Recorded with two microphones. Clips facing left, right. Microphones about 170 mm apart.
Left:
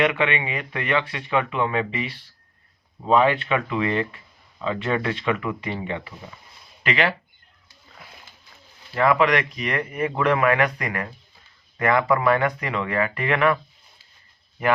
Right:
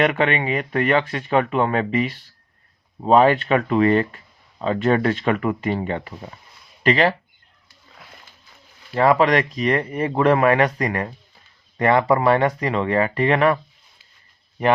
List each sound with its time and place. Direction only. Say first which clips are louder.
0.0 s speech: right 3 dB; 45° right (ahead or behind)
9.0 s speech: right 3 dB; 35° right (ahead or behind)